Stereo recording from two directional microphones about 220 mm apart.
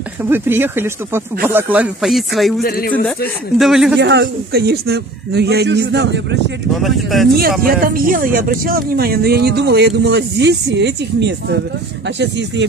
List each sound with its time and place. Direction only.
0.2 s speech: 10° right (ahead or behind)
2.6 s a man's voice: 40° left (ahead or behind)
3.5 s speech: centre (ahead or behind)
4.0 s speech: 50° right (ahead or behind)
6.7 s speech: centre (ahead or behind)
7.6 s speech: 40° right (ahead or behind)